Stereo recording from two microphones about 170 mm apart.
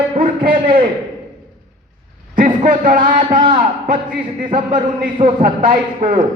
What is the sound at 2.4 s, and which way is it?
A man's voice, 50° right (ahead or behind).